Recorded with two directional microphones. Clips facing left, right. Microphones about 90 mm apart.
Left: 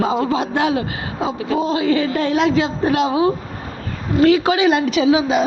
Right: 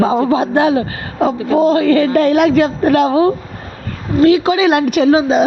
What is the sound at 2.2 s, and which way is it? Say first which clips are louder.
A woman's voice: right 6 dB; 60° right (ahead or behind).